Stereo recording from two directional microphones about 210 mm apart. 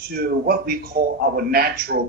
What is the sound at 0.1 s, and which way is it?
A man's voice, 45° right (ahead or behind).